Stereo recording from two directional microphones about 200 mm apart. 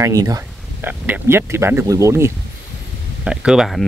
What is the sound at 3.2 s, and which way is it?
Speech, 5° right (ahead or behind).